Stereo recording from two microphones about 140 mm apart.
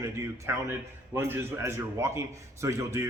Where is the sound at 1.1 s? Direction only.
15° right (ahead or behind).